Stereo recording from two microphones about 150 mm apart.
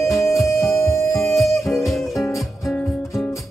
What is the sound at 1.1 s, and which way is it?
Music, centre (ahead or behind).